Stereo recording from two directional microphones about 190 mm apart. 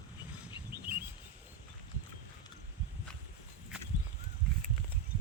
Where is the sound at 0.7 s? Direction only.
10° right (ahead or behind).